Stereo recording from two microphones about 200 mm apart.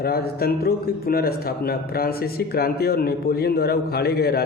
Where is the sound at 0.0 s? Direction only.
50° left (ahead or behind).